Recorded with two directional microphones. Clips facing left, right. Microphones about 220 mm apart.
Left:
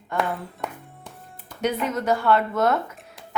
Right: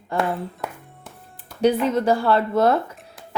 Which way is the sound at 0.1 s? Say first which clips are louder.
Right 2 dB; 30° right (ahead or behind).